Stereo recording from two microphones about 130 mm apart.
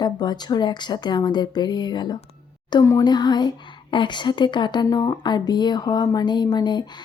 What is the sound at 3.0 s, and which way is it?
Speech, 35° left (ahead or behind).